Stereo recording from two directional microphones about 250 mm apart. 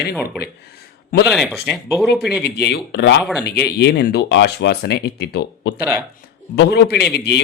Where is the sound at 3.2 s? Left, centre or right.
Centre.